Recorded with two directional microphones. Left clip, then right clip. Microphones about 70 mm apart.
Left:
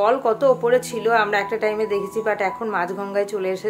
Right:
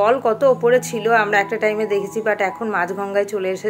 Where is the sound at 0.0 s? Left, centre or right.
Right.